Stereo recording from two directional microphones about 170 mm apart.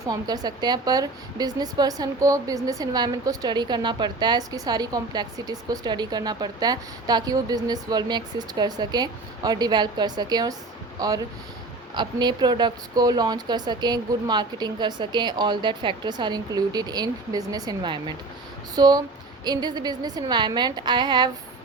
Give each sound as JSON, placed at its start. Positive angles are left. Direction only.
{"t": 0.0, "sound": "a woman's voice", "side_deg": -20}